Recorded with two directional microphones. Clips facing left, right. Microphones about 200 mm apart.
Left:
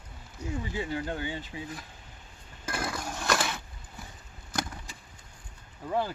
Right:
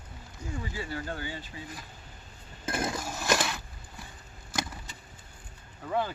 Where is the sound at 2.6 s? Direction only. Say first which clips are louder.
Right 3 dB; 20° right (ahead or behind).